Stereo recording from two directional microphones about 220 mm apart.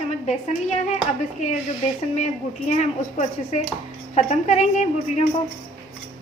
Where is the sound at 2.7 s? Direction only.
30° left (ahead or behind).